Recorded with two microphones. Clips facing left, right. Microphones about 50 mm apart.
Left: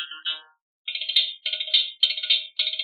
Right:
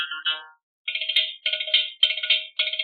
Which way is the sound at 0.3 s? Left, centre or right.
Right.